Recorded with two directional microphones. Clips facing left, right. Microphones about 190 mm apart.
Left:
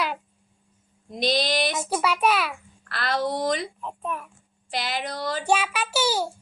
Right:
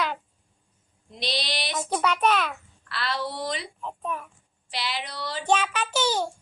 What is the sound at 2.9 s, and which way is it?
Speech, 45° left (ahead or behind).